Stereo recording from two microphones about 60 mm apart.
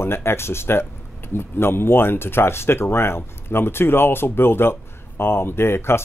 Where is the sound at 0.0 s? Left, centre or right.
Left.